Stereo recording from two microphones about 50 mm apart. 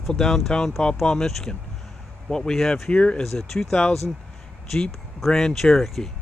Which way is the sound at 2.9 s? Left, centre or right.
Left.